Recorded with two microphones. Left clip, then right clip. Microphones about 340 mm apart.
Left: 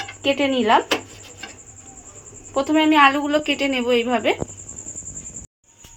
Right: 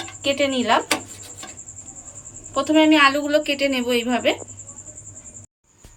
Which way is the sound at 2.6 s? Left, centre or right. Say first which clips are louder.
Even; centre.